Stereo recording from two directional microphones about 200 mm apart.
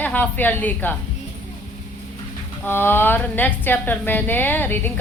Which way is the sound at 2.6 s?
10° left (ahead or behind).